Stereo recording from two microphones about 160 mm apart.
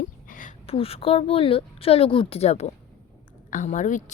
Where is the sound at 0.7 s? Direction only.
35° left (ahead or behind).